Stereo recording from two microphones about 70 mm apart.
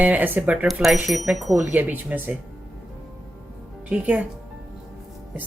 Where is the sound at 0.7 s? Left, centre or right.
Centre.